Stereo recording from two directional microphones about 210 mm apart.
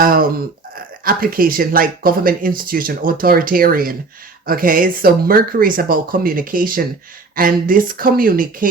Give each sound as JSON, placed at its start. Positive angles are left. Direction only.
{"t": 0.0, "sound": "speech", "side_deg": -45}